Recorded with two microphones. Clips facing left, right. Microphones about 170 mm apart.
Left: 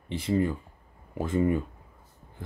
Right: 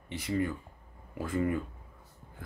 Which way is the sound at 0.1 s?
30° left (ahead or behind).